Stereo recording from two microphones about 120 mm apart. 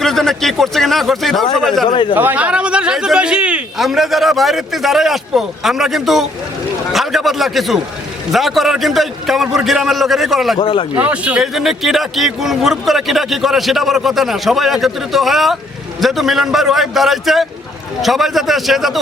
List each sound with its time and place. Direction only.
0.0 s speech: centre (ahead or behind)
1.9 s speech: 40° left (ahead or behind)
2.1 s speech: 15° right (ahead or behind)
10.6 s speech: 45° left (ahead or behind)
10.9 s speech: 10° right (ahead or behind)